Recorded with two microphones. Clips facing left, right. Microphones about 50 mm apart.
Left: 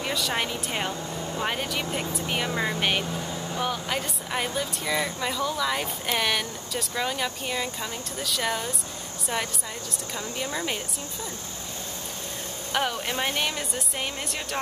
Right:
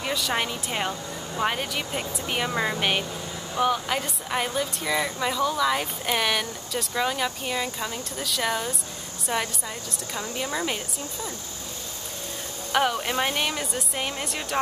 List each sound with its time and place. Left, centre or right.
0.0 s a woman's voice: centre
10.1 s a woman's voice: right
12.7 s a woman's voice: centre